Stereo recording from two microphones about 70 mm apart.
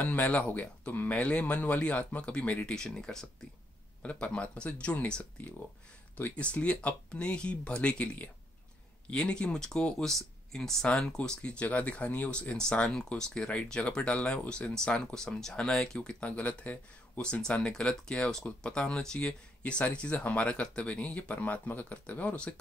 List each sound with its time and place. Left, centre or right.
0.0 s speech: left